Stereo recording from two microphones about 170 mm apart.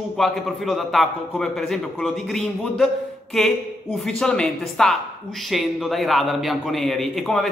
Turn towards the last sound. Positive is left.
turn(degrees=0)  # may be behind; listen again after turning